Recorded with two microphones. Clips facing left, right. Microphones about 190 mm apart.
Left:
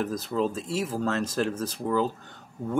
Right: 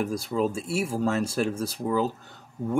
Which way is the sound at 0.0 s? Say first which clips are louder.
Right 1 dB; 10° right (ahead or behind).